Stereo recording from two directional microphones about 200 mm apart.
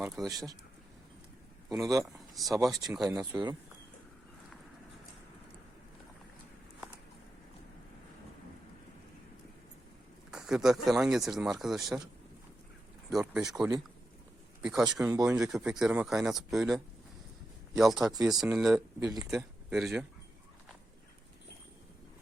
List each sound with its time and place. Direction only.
0.3 s speech: 15° right (ahead or behind)
1.7 s speech: 15° right (ahead or behind)
2.1 s a sound: centre (ahead or behind)
2.5 s speech: 15° right (ahead or behind)
10.3 s speech: 5° right (ahead or behind)
13.1 s speech: centre (ahead or behind); by 19.3 s 15° right (ahead or behind)
19.3 s speech: centre (ahead or behind)